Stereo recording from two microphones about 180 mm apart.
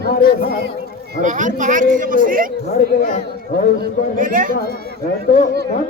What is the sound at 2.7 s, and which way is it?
Speech, 50° left (ahead or behind).